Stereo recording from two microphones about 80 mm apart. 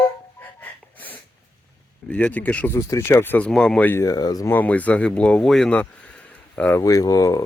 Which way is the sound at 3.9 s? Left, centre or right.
Left.